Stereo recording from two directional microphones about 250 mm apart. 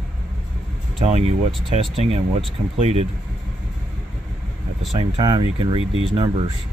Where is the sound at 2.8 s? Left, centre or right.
Right.